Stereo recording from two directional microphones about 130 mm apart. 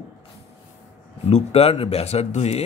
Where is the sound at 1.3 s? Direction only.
50° left (ahead or behind).